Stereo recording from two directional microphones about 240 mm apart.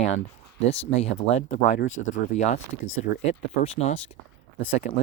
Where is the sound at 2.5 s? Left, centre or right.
Left.